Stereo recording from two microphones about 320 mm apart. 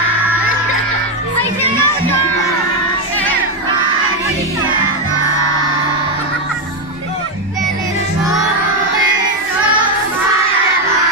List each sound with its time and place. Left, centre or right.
1.4 s music: centre